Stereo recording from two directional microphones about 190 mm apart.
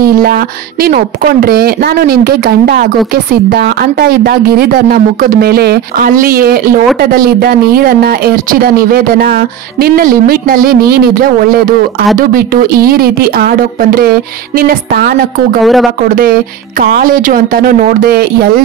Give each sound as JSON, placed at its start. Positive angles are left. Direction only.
{"t": 0.0, "sound": "speech", "side_deg": -50}
{"t": 15.6, "sound": "speech", "side_deg": 0}
{"t": 16.8, "sound": "speech", "side_deg": -50}